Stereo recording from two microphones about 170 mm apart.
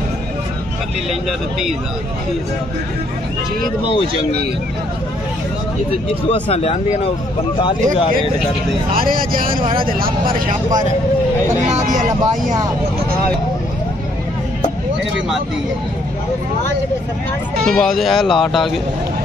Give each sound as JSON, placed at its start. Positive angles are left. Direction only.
{"t": 6.2, "sound": "speech", "side_deg": 35}
{"t": 8.9, "sound": "speech", "side_deg": -55}
{"t": 17.6, "sound": "speech", "side_deg": 5}